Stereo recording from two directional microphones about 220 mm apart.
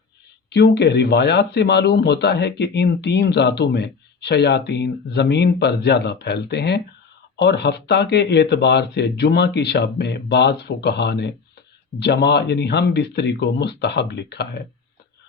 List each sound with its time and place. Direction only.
0.5 s speech: 50° left (ahead or behind)